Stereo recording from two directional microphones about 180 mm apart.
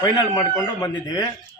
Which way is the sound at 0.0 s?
20° left (ahead or behind).